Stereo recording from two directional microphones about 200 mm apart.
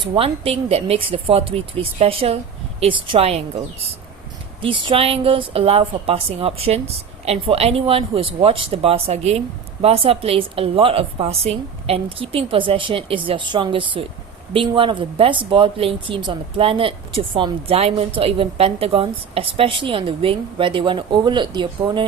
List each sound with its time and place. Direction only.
0.0 s speech: 25° right (ahead or behind)